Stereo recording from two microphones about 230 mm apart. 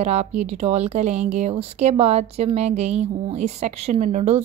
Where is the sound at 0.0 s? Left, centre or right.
Right.